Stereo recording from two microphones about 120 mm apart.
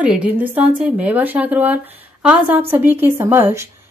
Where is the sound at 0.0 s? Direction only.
10° right (ahead or behind).